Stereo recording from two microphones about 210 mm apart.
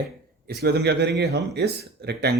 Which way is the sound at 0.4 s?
50° right (ahead or behind).